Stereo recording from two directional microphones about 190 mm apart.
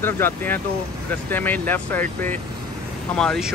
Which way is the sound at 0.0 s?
10° left (ahead or behind).